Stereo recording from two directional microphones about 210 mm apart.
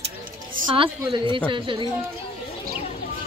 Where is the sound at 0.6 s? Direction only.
20° right (ahead or behind).